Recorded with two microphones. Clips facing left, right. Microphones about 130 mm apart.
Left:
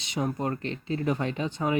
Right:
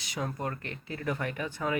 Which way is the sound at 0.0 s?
25° left (ahead or behind).